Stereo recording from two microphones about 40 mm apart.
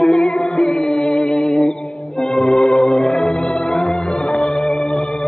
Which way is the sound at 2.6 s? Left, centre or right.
Centre.